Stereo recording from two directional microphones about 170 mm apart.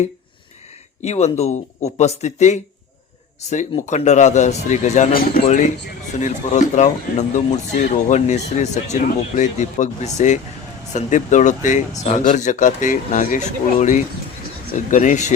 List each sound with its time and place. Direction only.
1.0 s speech: 40° left (ahead or behind)